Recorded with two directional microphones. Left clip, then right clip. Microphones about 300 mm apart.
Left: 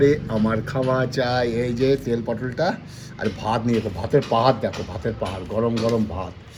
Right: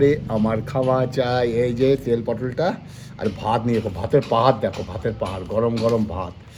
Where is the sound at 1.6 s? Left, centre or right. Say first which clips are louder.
Right 2 dB; centre.